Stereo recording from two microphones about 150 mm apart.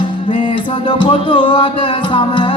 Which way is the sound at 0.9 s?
30° left (ahead or behind).